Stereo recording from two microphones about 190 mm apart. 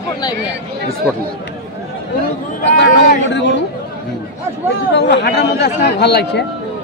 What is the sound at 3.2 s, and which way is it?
Speech, 70° left (ahead or behind).